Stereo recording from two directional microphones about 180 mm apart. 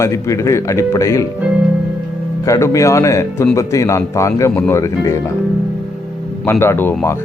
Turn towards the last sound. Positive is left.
turn(degrees=10)  # may be behind; listen again after turning